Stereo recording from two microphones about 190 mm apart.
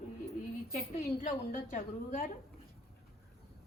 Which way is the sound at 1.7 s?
45° left (ahead or behind).